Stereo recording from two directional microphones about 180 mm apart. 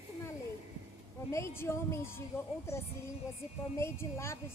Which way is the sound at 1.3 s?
15° left (ahead or behind).